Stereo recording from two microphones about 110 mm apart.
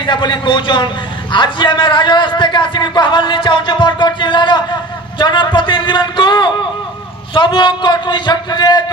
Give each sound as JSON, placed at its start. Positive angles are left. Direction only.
{"t": 0.0, "sound": "a man's voice", "side_deg": 45}